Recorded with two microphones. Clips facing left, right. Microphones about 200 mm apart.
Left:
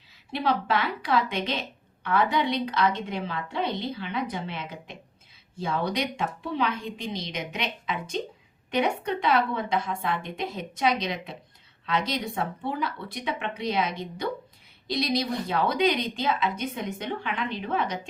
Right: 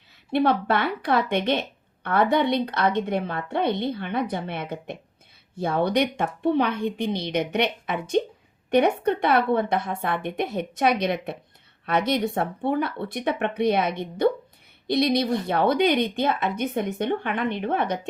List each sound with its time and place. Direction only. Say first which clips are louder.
0.3 s a woman's voice: right 5 dB; 60° right (ahead or behind)